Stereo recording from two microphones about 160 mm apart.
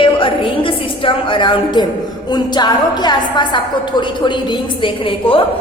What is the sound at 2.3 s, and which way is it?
A woman's voice, 25° left (ahead or behind).